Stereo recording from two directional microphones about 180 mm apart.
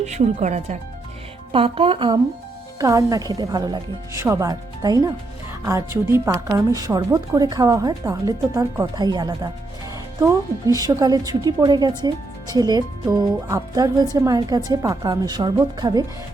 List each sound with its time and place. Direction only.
0.0 s speech: 40° right (ahead or behind)
2.7 s a woman's voice: 20° right (ahead or behind)
10.8 s a woman's voice: 20° right (ahead or behind)